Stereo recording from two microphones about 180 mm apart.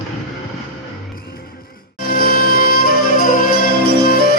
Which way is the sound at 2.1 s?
55° left (ahead or behind).